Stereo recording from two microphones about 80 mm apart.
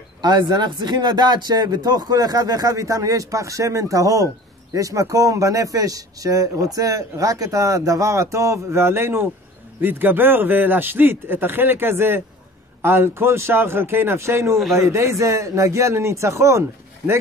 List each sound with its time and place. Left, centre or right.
0.2 s a man's voice: right